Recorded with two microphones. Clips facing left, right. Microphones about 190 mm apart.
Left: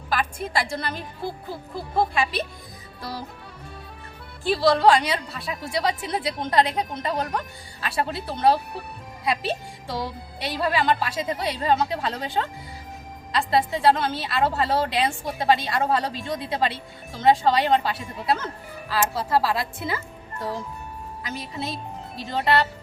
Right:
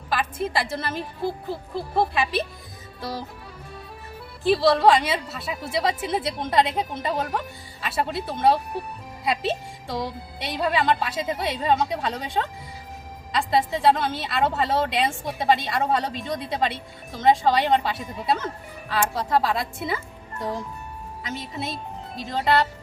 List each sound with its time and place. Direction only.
0.1 s speech: centre (ahead or behind)
4.4 s speech: centre (ahead or behind)
20.4 s a child's voice: 20° right (ahead or behind)
21.2 s speech: centre (ahead or behind)